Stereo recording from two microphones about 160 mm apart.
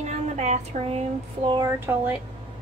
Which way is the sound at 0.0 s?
45° right (ahead or behind).